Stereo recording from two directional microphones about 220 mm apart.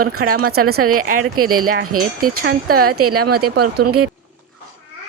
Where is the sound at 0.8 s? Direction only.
80° right.